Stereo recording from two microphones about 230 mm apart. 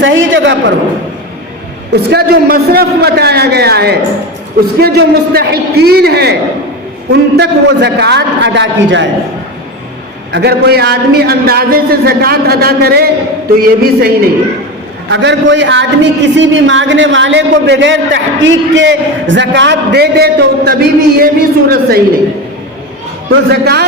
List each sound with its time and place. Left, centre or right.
0.0 s a man's voice: right
1.9 s a man's voice: right
10.3 s a man's voice: right
15.1 s a man's voice: right
23.3 s a man's voice: right